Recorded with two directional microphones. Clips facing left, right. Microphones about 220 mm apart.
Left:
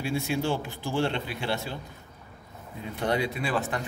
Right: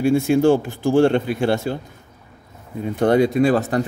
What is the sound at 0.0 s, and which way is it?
Speech, 50° right (ahead or behind).